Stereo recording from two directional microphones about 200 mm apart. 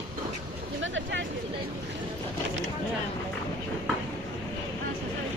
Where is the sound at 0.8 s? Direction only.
70° right (ahead or behind).